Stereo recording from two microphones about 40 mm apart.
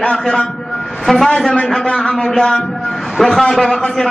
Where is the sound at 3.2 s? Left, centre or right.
Centre.